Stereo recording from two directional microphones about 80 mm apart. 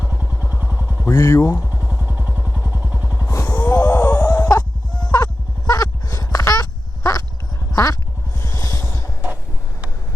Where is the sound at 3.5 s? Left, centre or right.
Centre.